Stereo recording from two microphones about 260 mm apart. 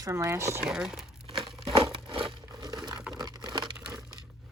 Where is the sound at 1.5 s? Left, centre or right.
Centre.